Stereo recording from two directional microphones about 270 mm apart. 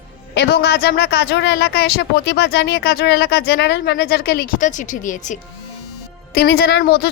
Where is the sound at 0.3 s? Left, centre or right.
Left.